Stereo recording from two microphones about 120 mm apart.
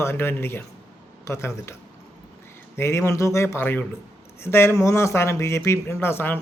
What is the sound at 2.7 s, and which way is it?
Speech, 20° left (ahead or behind).